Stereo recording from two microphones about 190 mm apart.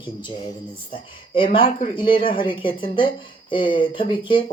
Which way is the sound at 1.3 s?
25° left (ahead or behind).